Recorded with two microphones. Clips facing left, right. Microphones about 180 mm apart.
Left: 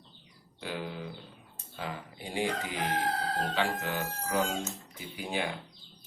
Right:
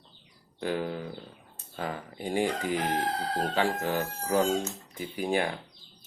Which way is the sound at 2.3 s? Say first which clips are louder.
Right 5 dB; 45° right (ahead or behind).